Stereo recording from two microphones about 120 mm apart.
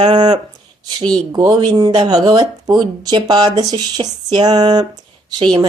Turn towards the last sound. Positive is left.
turn(degrees=-35)  # may be behind; listen again after turning